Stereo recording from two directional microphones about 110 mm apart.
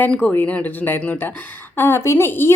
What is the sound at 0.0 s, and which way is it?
A woman's voice, 15° left (ahead or behind).